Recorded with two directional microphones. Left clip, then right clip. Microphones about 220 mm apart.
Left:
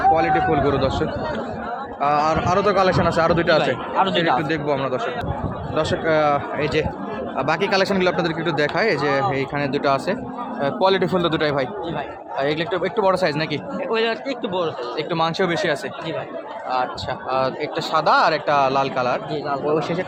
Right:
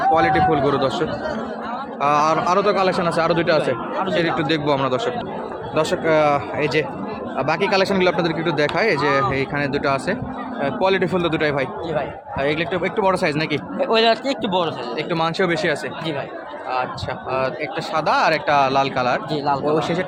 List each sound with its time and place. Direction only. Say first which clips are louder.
0.1 s speech: right 1 dB; 5° right (ahead or behind)
4.4 s speech: right 2 dB; 15° right (ahead or behind)
13.8 s speech: right 5 dB; 40° right (ahead or behind)
14.9 s speech: even; centre (ahead or behind)
17.3 s speech: left 1 dB; 10° left (ahead or behind); by 19.2 s 5° right (ahead or behind)